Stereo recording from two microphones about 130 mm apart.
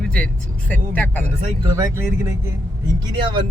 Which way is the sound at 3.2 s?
40° right (ahead or behind).